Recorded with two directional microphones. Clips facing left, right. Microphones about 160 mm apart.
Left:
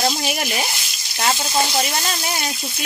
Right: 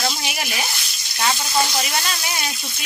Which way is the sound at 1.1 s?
30° left (ahead or behind).